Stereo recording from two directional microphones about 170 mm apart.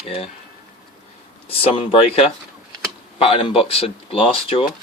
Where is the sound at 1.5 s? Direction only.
35° left (ahead or behind).